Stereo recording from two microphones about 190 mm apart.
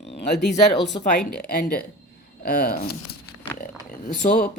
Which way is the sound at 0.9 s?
25° left (ahead or behind).